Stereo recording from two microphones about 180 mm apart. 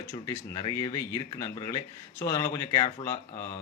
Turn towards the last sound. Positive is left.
turn(degrees=15)  # may be behind; listen again after turning